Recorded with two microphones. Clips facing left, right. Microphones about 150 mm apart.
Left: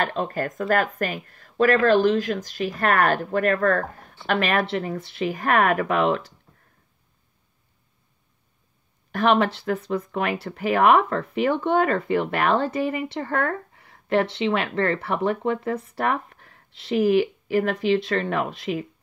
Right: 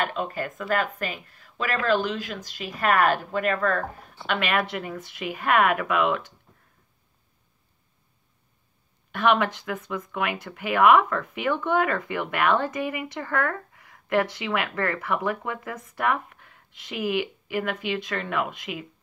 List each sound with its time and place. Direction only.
0.0 s speech: 40° left (ahead or behind)
9.1 s speech: 35° left (ahead or behind)